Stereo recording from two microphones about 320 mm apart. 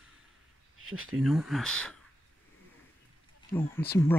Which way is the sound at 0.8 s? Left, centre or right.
Right.